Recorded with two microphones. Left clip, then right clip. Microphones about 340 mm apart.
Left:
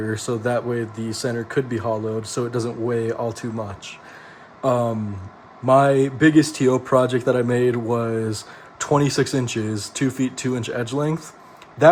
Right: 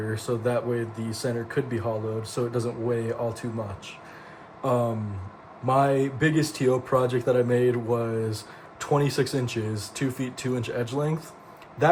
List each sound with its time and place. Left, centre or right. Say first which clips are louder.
0.1 s speech: left 3 dB; left
4.6 s speech: left 5 dB; left